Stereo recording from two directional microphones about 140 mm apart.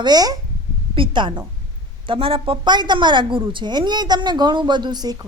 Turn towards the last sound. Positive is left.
turn(degrees=-30)  # may be behind; listen again after turning